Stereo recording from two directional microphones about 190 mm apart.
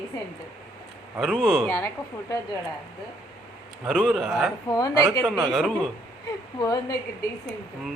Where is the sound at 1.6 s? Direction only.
15° left (ahead or behind).